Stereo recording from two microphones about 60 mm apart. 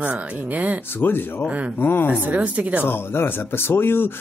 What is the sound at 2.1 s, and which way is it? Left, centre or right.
Speech, right.